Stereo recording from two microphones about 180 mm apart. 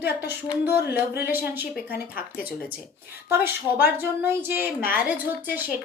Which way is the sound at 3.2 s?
10° right (ahead or behind).